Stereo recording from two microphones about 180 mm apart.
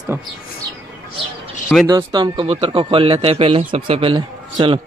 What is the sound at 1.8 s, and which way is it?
Speech, 25° right (ahead or behind).